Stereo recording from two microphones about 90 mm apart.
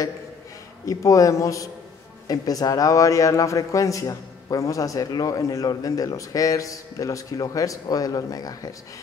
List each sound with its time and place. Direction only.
0.8 s a man's voice: 40° left (ahead or behind)